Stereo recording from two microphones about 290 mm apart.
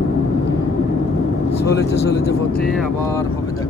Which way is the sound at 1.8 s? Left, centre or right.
Left.